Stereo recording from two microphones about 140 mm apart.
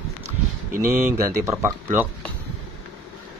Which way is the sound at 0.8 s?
15° right (ahead or behind).